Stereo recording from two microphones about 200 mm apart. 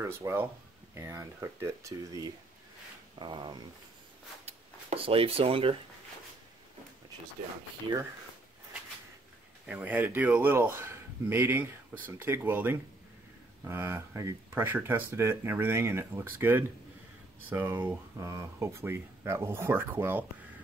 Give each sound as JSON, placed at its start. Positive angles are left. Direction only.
{"t": 0.0, "sound": "speech", "side_deg": -15}
{"t": 9.7, "sound": "speech", "side_deg": -10}